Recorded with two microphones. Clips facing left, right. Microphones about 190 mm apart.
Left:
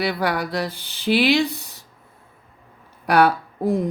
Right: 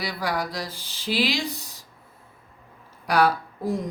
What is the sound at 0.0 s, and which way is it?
Speech, 60° left (ahead or behind).